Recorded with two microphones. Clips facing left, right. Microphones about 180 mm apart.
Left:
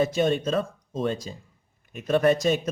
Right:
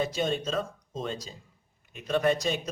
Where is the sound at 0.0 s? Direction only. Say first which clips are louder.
Left 6 dB; 50° left (ahead or behind).